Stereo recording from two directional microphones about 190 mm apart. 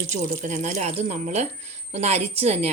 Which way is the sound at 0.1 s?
40° right (ahead or behind).